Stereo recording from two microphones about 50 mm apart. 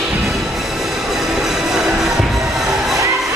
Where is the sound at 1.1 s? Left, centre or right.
Centre.